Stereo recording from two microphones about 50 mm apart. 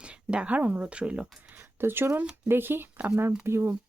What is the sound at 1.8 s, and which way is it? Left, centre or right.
Speech, right.